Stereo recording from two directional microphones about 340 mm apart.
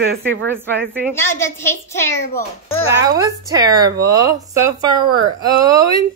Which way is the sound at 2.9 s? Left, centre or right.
Centre.